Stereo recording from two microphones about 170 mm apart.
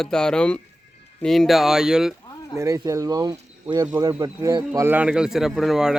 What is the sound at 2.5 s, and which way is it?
Speech, 20° right (ahead or behind).